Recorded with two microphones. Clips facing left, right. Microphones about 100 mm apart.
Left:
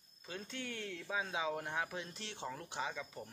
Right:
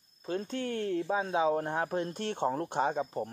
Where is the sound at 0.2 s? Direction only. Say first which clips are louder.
Right 12 dB; 40° right (ahead or behind).